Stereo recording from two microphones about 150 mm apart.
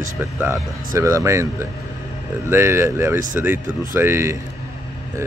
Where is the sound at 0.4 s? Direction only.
15° right (ahead or behind).